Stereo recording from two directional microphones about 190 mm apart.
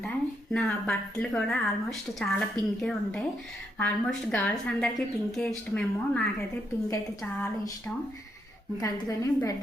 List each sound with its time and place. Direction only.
0.5 s a woman's voice: centre (ahead or behind)
6.9 s a woman's voice: 15° left (ahead or behind)